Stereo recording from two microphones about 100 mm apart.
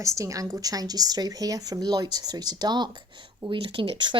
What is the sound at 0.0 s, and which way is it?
Speech, 35° right (ahead or behind).